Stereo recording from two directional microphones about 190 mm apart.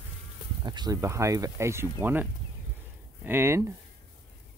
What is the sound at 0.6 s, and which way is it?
Speech, 20° right (ahead or behind).